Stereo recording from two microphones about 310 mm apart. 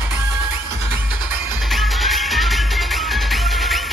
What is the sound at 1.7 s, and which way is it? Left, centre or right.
Music, centre.